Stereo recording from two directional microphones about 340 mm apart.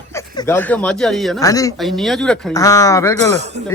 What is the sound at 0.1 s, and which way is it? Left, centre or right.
Speech, centre.